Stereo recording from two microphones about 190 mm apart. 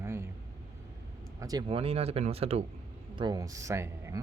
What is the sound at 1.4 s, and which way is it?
Speech, 20° right (ahead or behind).